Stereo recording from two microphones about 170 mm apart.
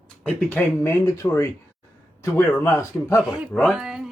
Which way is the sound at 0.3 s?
10° left (ahead or behind).